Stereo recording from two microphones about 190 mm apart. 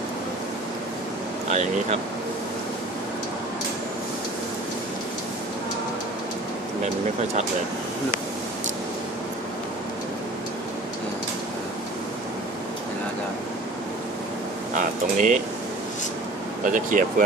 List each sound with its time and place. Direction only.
1.5 s speech: 35° right (ahead or behind)
14.8 s speech: 40° right (ahead or behind)
16.6 s speech: 45° right (ahead or behind)